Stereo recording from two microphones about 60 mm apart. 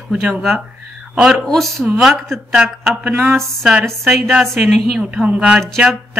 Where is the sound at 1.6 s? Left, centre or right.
Centre.